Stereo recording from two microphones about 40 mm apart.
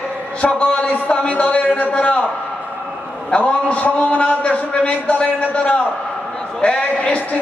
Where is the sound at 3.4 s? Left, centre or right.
Left.